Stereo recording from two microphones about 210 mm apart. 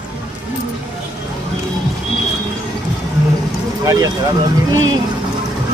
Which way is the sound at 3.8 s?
15° right (ahead or behind).